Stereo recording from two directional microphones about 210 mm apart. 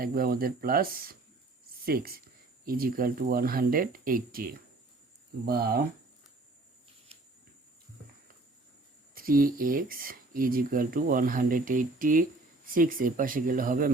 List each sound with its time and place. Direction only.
0.0 s speech: 45° right (ahead or behind)
9.1 s speech: 45° right (ahead or behind)